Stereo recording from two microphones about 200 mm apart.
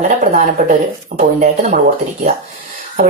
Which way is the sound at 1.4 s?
35° right (ahead or behind).